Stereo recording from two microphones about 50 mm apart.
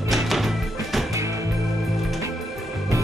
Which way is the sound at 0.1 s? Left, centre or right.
Centre.